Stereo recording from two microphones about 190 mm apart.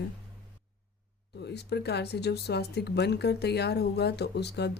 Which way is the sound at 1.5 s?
60° left (ahead or behind).